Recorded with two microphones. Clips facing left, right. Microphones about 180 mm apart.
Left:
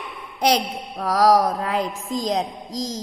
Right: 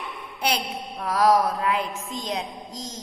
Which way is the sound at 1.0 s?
40° left (ahead or behind).